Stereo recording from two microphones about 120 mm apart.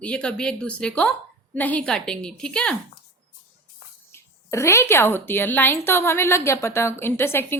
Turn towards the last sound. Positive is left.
turn(degrees=20)  # may be behind; listen again after turning